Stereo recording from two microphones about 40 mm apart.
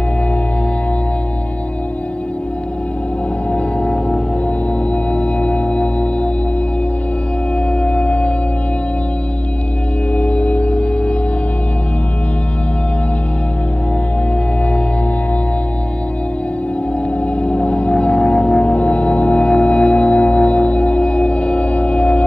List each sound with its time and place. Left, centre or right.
3.5 s music: left
7.8 s music: left
10.1 s organ: left
17.4 s music: left